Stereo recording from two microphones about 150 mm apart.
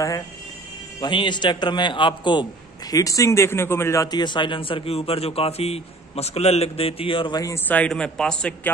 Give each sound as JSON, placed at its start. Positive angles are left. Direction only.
{"t": 1.0, "sound": "speech", "side_deg": 30}